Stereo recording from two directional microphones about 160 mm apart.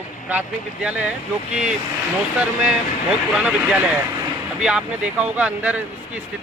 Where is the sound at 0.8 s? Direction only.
10° right (ahead or behind).